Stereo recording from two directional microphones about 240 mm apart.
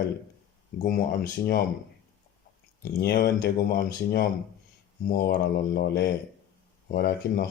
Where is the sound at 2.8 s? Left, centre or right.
Left.